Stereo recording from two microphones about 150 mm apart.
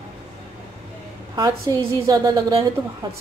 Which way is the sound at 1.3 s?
25° right (ahead or behind).